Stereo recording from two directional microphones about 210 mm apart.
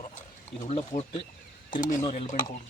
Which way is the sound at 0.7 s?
30° left (ahead or behind).